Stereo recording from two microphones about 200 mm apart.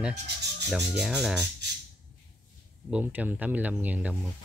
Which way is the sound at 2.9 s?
10° right (ahead or behind).